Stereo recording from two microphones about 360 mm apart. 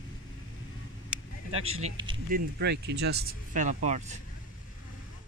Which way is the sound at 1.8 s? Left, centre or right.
Centre.